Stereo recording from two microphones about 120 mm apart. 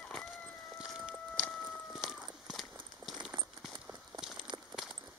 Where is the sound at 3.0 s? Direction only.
35° right (ahead or behind).